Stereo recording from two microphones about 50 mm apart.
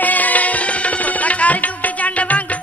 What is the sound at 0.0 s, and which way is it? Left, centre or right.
Music, left.